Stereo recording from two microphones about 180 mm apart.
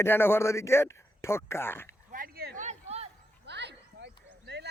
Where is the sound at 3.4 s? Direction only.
70° right (ahead or behind).